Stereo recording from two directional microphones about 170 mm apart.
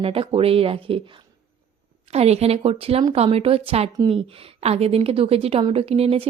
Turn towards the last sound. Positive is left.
turn(degrees=-35)  # may be behind; listen again after turning